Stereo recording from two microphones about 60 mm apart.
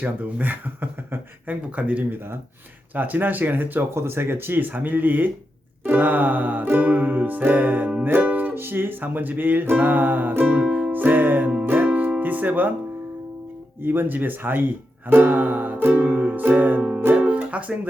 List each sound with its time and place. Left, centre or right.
0.0 s speech: right
10.6 s music: centre
13.8 s speech: right
15.1 s music: right